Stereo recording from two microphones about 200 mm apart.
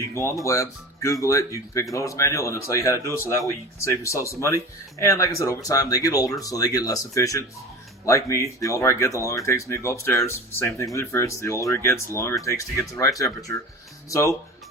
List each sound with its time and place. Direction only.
0.1 s speech: 15° left (ahead or behind)